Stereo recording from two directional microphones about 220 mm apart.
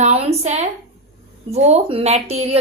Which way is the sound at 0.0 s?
30° right (ahead or behind).